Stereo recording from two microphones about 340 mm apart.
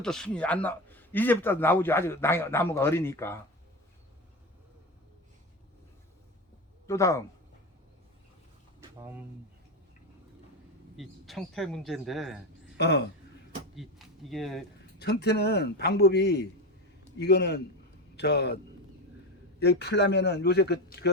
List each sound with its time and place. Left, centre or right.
0.0 s speech: centre
6.8 s speech: centre
9.0 s speech: centre
10.9 s speech: centre
12.7 s speech: left
13.7 s speech: centre
14.9 s speech: left
19.5 s speech: left